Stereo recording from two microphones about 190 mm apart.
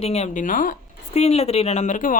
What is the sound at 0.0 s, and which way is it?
Speech, 35° left (ahead or behind).